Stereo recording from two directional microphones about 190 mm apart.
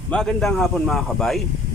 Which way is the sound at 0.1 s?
Centre (ahead or behind).